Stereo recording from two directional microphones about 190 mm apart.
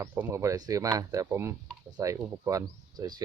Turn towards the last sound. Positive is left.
turn(degrees=-20)  # may be behind; listen again after turning